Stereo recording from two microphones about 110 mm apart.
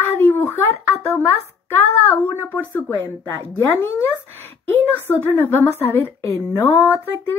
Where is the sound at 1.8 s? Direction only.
15° left (ahead or behind).